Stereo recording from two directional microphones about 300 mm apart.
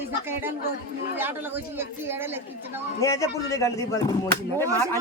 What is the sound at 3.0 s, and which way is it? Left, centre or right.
Speech, centre.